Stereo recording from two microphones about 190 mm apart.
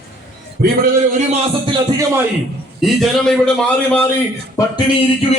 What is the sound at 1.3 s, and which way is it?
Speech, 25° right (ahead or behind).